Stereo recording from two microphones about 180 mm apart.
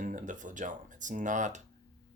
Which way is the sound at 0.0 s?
45° right (ahead or behind).